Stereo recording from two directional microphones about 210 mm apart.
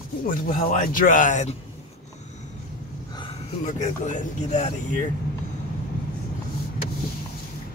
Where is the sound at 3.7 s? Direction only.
35° left (ahead or behind).